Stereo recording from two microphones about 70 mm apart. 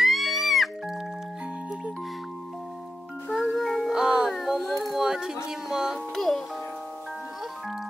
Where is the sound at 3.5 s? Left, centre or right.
Centre.